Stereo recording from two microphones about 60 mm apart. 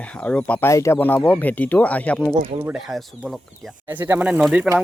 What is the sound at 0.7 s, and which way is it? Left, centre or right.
Speech, left.